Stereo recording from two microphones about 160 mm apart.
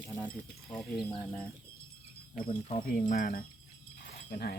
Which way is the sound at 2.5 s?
35° left (ahead or behind).